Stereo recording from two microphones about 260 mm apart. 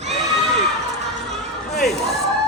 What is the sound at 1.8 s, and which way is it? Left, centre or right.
Speech, centre.